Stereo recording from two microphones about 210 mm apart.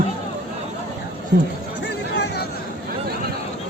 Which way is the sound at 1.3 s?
50° right (ahead or behind).